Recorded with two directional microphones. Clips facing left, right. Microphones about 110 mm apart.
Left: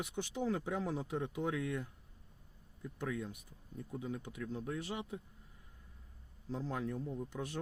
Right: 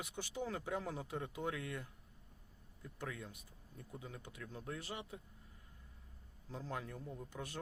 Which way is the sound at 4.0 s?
25° left (ahead or behind).